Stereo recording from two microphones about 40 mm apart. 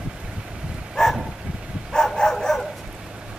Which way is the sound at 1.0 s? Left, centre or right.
Centre.